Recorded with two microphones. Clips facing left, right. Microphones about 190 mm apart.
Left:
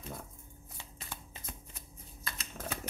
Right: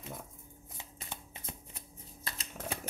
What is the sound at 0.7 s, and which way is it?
Shuffling cards, 20° right (ahead or behind).